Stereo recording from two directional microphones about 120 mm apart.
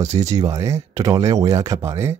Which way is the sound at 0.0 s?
70° right (ahead or behind).